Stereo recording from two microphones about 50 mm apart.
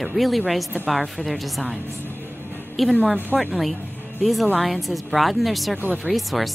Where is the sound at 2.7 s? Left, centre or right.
Centre.